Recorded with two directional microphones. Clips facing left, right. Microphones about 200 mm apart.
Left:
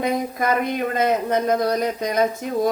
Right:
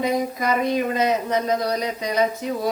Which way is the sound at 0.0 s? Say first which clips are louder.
Even; 55° left (ahead or behind).